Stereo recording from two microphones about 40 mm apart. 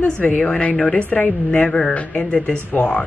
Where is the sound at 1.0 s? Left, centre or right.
Left.